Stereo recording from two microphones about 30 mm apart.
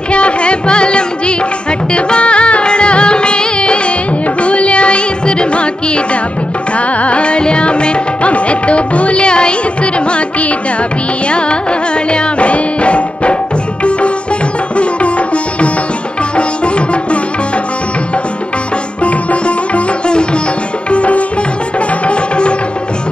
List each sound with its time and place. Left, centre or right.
0.1 s music: left
7.0 s music: left
11.2 s music: left
14.8 s sitar: left
16.3 s tabla: left
19.0 s music: left
20.9 s music: left